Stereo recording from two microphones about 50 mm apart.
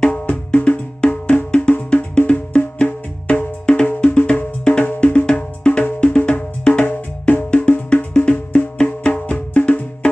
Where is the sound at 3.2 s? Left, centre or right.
Left.